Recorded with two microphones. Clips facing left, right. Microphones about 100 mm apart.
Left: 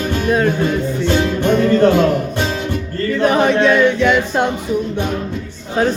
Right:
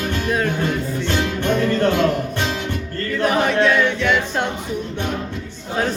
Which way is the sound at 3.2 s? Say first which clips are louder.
Left 4 dB; 25° left (ahead or behind).